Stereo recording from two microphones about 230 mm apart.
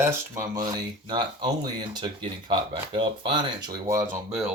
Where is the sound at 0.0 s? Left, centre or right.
Centre.